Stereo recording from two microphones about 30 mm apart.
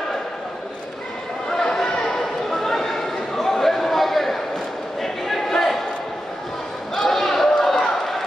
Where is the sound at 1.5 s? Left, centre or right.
Centre.